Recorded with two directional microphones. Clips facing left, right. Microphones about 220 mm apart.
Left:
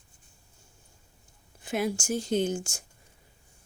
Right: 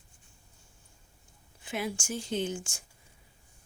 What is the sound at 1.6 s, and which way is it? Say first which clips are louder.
Speech: left 5 dB; 40° left (ahead or behind).